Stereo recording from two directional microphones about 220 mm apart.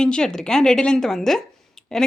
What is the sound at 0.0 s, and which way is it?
A woman's voice, 5° left (ahead or behind).